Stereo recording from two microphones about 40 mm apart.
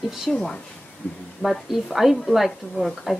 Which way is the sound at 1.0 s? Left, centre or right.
Left.